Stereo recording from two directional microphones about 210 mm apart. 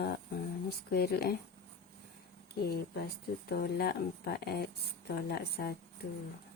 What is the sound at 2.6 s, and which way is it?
A woman's voice, 50° left (ahead or behind).